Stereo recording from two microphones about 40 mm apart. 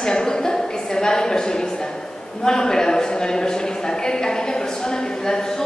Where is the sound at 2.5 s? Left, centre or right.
Centre.